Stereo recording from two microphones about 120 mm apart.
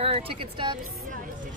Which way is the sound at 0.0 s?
50° right (ahead or behind).